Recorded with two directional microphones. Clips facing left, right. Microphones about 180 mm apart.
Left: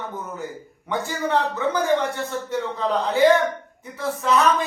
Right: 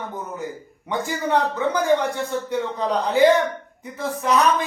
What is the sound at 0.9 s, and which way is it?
A man's voice, 15° right (ahead or behind).